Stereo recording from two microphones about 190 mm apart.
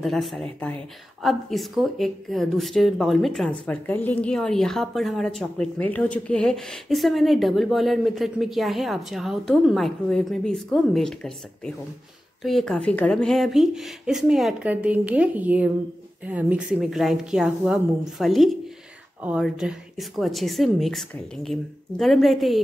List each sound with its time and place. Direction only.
0.0 s speech: centre (ahead or behind)